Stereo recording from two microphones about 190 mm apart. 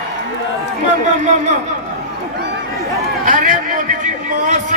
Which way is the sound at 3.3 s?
40° right (ahead or behind).